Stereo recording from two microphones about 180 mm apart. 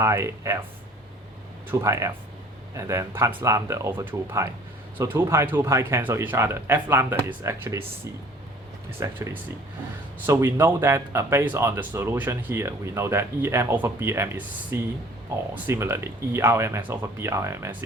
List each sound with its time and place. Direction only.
0.0 s speech: 15° right (ahead or behind)
1.8 s speech: 15° right (ahead or behind)
9.0 s speech: 15° right (ahead or behind)